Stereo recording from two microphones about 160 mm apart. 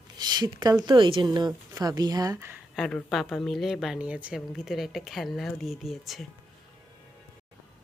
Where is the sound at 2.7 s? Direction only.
5° left (ahead or behind).